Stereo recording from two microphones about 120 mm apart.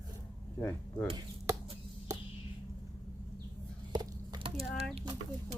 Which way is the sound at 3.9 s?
35° right (ahead or behind).